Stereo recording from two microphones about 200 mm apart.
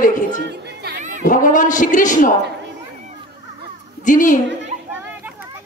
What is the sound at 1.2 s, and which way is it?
Speech, 40° left (ahead or behind).